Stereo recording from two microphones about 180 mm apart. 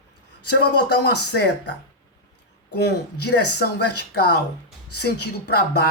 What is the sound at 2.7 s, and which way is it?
Speech, 65° left (ahead or behind).